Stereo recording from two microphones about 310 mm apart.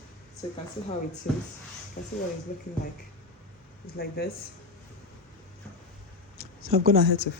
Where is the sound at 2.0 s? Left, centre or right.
Left.